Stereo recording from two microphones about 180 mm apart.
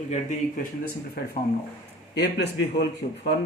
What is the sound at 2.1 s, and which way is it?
Speech, 70° left (ahead or behind).